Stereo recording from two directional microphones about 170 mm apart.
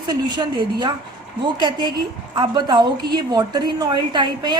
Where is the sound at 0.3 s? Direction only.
25° right (ahead or behind).